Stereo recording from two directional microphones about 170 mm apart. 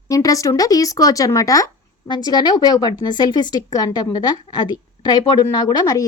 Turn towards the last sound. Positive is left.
turn(degrees=20)  # may be behind; listen again after turning